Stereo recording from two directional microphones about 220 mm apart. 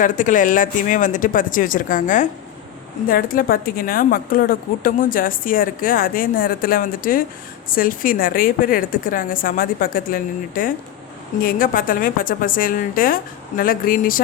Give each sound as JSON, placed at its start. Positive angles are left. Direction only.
{"t": 0.0, "sound": "a woman's voice", "side_deg": 35}